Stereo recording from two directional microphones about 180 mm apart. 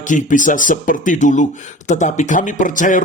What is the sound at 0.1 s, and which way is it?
Speech, 45° left (ahead or behind).